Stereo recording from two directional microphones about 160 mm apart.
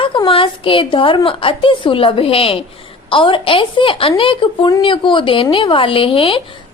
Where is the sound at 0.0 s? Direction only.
30° left (ahead or behind).